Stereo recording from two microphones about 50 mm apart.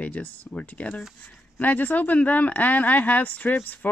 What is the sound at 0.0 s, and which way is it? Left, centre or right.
Speech, left.